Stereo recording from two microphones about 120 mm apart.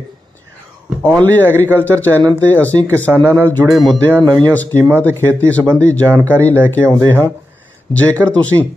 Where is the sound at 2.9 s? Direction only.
20° right (ahead or behind).